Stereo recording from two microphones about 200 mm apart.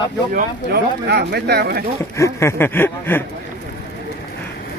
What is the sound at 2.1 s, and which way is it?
Speech, 15° left (ahead or behind).